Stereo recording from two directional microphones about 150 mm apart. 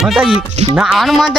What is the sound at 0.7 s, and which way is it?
Speech, 5° right (ahead or behind).